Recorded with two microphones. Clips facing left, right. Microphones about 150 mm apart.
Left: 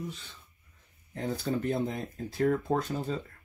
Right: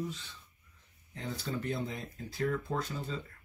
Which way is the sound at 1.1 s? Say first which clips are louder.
Left 7 dB; 45° left (ahead or behind).